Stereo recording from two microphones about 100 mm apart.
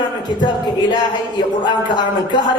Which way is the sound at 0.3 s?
50° left (ahead or behind).